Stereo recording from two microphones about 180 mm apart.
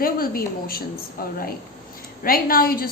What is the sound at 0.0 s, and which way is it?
Speech, 55° left (ahead or behind).